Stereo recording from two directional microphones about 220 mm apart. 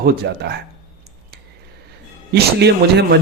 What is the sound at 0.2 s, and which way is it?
Speech, 50° right (ahead or behind).